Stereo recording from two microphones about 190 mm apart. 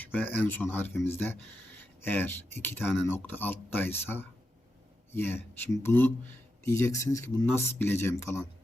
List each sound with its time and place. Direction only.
0.0 s speech: 10° left (ahead or behind)